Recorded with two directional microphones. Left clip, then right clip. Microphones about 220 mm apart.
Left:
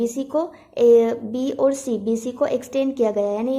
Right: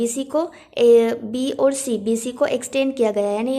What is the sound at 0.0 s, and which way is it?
Speech, 15° right (ahead or behind).